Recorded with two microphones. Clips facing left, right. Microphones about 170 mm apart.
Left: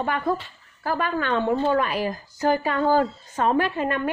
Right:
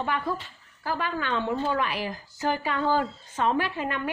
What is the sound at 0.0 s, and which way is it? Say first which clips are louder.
A woman's voice: left 4 dB; 50° left (ahead or behind).